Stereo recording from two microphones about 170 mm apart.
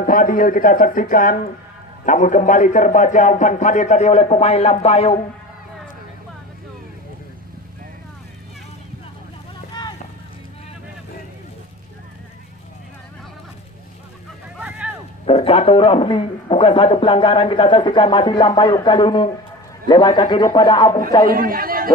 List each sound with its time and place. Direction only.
0.0 s a man's voice: 55° left (ahead or behind); by 5.2 s 35° left (ahead or behind)
9.7 s a sound: 25° left (ahead or behind)
15.2 s a man's voice: 35° left (ahead or behind)
21.3 s a man's voice: 60° right (ahead or behind)